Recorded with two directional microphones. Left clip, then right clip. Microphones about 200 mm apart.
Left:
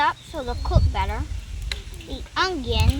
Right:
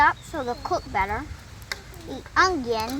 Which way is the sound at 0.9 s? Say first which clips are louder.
Right 3 dB; 15° right (ahead or behind).